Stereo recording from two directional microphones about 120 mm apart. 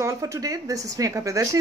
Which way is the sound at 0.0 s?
30° right (ahead or behind).